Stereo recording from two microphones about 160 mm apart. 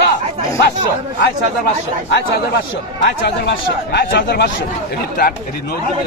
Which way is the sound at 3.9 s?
90° left.